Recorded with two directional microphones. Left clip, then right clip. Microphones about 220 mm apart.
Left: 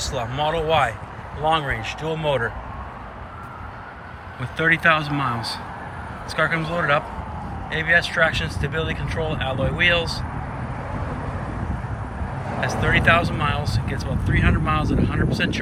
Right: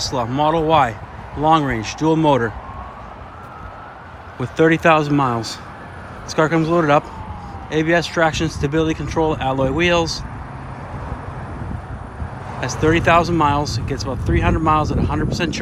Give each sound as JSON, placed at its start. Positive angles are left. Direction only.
{"t": 0.2, "sound": "speech", "side_deg": -25}
{"t": 4.4, "sound": "speech", "side_deg": -20}
{"t": 12.5, "sound": "speech", "side_deg": -20}